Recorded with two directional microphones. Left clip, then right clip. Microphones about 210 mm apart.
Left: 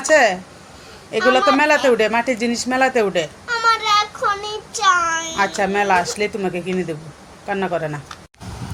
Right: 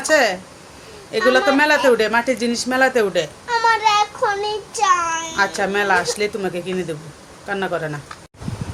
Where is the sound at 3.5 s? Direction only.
15° right (ahead or behind).